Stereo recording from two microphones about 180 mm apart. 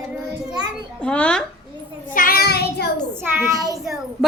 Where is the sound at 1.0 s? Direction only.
5° left (ahead or behind).